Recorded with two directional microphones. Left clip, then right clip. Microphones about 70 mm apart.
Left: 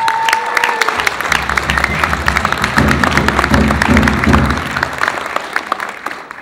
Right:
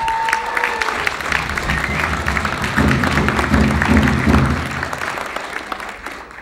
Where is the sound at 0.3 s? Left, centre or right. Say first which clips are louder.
Left 5 dB; left.